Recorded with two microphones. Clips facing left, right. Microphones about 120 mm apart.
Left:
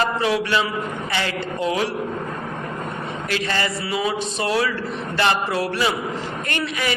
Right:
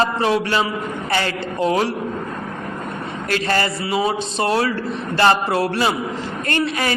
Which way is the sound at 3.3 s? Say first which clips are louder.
Right 4 dB; 45° right (ahead or behind).